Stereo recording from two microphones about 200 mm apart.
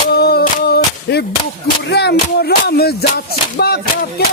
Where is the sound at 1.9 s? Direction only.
55° left (ahead or behind).